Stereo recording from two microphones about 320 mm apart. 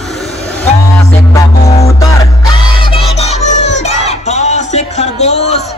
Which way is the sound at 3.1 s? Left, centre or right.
Centre.